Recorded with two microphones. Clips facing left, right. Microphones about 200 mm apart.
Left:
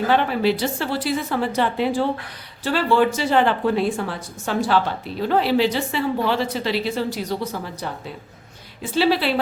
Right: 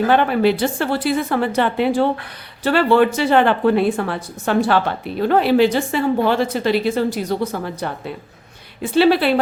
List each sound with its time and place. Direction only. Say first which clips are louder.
0.1 s a woman's voice: right 2 dB; 55° right (ahead or behind)